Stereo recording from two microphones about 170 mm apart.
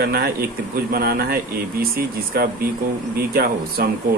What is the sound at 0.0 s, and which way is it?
Speech, 70° right (ahead or behind).